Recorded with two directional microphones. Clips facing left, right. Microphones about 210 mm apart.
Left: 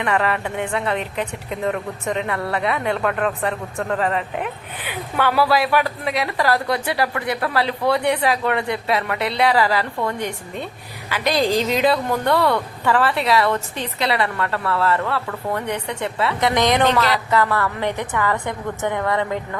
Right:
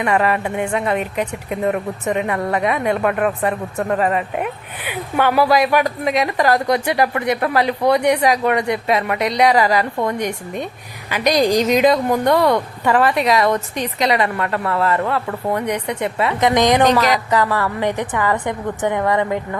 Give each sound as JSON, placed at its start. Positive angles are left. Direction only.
{"t": 0.0, "sound": "a woman's voice", "side_deg": -15}